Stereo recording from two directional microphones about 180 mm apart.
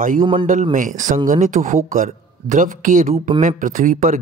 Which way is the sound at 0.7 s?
45° right (ahead or behind).